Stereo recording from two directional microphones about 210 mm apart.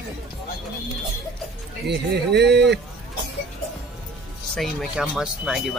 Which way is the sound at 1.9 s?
55° right (ahead or behind).